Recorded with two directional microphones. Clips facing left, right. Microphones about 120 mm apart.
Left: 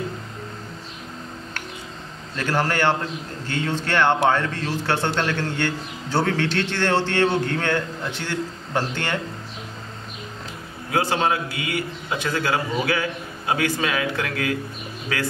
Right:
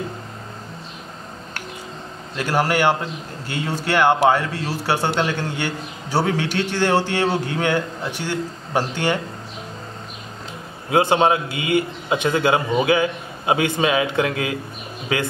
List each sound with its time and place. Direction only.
2.3 s a man's voice: 10° right (ahead or behind)
10.9 s a man's voice: 20° right (ahead or behind)